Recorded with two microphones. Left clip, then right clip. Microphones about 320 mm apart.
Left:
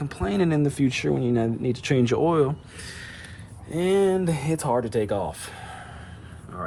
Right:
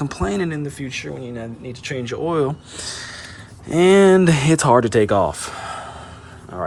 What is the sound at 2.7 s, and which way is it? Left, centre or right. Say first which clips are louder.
Speech: right 8 dB; centre.